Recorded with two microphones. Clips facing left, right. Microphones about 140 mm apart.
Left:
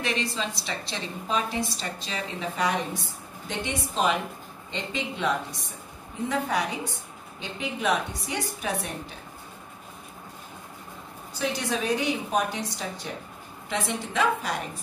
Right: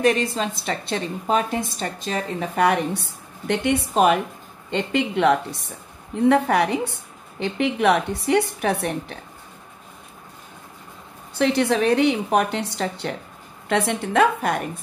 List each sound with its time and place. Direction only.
0.0 s a woman's voice: 50° right (ahead or behind); by 9.2 s 65° right (ahead or behind)
11.3 s a woman's voice: 65° right (ahead or behind)